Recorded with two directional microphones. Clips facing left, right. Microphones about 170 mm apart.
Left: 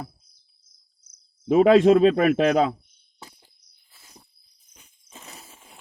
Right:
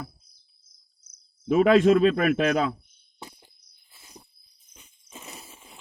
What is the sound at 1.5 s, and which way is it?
Speech, 30° left (ahead or behind).